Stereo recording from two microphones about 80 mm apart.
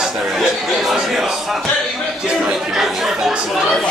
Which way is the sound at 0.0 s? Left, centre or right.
Centre.